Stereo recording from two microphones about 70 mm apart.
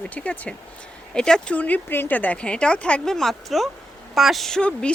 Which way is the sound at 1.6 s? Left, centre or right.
Left.